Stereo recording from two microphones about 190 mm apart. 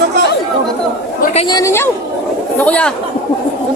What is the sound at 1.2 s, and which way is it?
Speech, 35° left (ahead or behind).